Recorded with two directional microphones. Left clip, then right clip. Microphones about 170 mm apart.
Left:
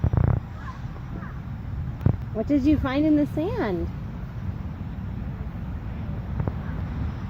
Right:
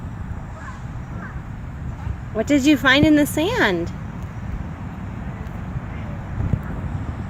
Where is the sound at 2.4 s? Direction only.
20° right (ahead or behind).